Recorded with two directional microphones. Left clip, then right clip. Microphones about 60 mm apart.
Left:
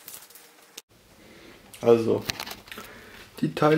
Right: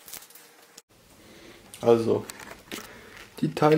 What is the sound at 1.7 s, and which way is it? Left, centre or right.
Speech, left.